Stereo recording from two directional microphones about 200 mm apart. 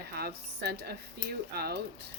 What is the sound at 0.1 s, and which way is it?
A woman's voice, 50° right (ahead or behind).